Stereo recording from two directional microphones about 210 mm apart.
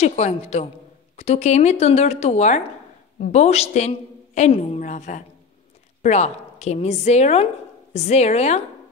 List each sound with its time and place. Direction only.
0.0 s speech: 30° left (ahead or behind)